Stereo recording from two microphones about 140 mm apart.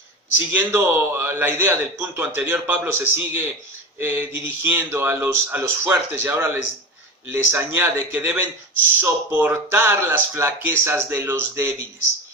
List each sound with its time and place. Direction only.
0.5 s a man's voice: 15° right (ahead or behind)